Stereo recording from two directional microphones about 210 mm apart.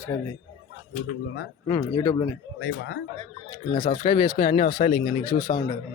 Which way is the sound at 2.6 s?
50° left (ahead or behind).